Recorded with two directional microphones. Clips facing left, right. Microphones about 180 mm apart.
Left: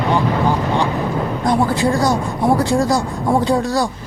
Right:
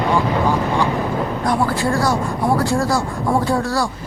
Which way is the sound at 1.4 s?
20° left (ahead or behind).